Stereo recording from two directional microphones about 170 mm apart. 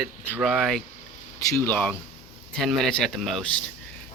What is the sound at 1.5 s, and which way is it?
Speech, 15° left (ahead or behind).